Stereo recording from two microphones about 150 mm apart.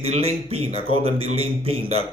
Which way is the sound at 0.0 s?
45° right (ahead or behind).